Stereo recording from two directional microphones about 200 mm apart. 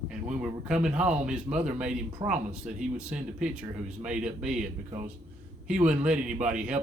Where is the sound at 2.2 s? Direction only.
20° right (ahead or behind).